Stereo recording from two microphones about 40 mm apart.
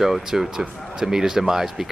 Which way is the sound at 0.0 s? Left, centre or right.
Centre.